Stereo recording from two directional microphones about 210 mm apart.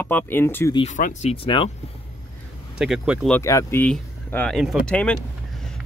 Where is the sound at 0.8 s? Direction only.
35° left (ahead or behind).